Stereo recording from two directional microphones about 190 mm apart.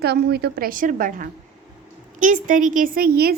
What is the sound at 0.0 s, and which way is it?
A woman's voice, 60° right (ahead or behind).